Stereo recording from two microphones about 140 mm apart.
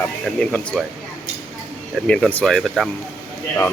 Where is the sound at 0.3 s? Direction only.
5° left (ahead or behind).